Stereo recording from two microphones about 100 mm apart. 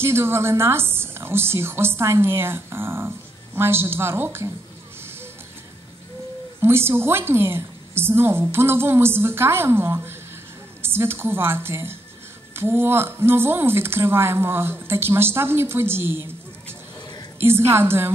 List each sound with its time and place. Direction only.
0.0 s a woman's voice: 25° right (ahead or behind)
6.6 s a woman's voice: 25° right (ahead or behind)